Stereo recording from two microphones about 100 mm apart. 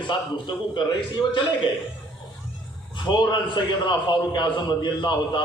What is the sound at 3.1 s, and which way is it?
A man's voice, 50° left (ahead or behind).